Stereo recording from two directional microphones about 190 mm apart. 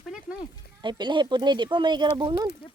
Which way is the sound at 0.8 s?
25° right (ahead or behind).